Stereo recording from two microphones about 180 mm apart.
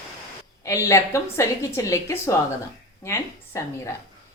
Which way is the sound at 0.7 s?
15° left (ahead or behind).